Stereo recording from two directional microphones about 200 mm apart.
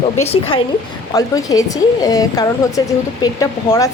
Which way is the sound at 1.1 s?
15° left (ahead or behind).